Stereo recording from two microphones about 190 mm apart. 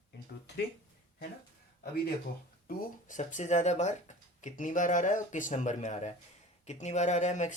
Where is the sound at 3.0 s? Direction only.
40° left (ahead or behind).